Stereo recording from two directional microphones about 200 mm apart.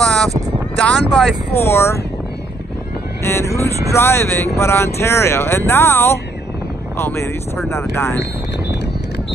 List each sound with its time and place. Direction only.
0.0 s a sound: 5° left (ahead or behind)
0.7 s speech: centre (ahead or behind)
3.3 s speech: 15° left (ahead or behind)